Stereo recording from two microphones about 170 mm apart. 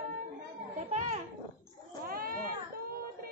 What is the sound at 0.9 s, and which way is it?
Children playing, 45° right (ahead or behind).